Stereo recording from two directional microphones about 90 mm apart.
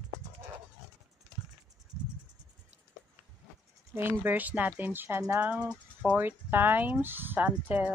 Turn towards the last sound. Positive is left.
turn(degrees=-15)  # may be behind; listen again after turning